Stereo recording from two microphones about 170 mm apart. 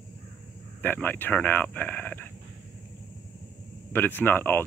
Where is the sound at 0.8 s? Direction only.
10° left (ahead or behind).